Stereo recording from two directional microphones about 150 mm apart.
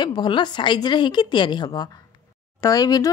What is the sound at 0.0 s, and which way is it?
A woman's voice, 30° left (ahead or behind).